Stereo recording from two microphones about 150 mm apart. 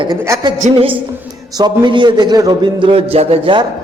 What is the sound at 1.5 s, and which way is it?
A man's voice, 30° right (ahead or behind).